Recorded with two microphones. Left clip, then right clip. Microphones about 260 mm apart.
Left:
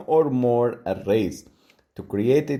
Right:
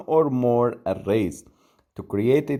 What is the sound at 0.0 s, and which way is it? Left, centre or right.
Speech, right.